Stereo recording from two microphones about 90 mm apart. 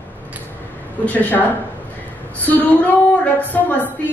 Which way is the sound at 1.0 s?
20° left (ahead or behind).